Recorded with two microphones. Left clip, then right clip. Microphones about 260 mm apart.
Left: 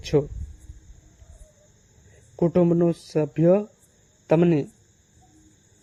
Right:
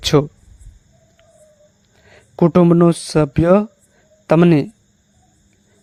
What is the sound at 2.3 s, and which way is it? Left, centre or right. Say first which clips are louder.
A man's voice: right 8 dB; right.